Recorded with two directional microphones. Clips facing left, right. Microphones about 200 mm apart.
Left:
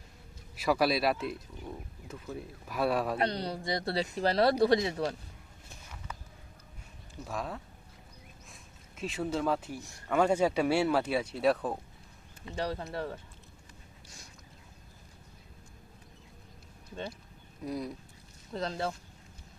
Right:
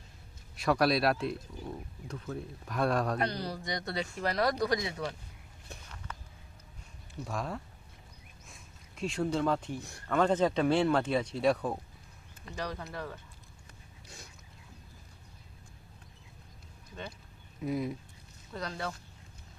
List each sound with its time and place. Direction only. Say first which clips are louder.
0.5 s speech: even; 5° left (ahead or behind)
3.2 s speech: left 2 dB; 25° left (ahead or behind)
7.3 s speech: even; centre (ahead or behind)
12.5 s speech: left 4 dB; 30° left (ahead or behind)
17.6 s speech: right 3 dB; centre (ahead or behind)
18.5 s speech: left 4 dB; 30° left (ahead or behind)